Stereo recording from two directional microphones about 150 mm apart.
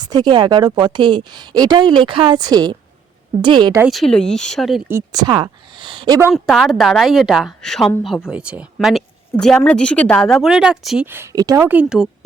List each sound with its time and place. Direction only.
0.0 s a woman's voice: 25° right (ahead or behind)
3.8 s a woman's voice: centre (ahead or behind)
5.1 s a woman's voice: 30° right (ahead or behind)
6.3 s a woman's voice: centre (ahead or behind)